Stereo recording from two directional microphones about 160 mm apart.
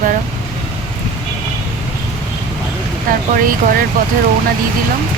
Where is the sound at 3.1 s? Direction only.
60° right (ahead or behind).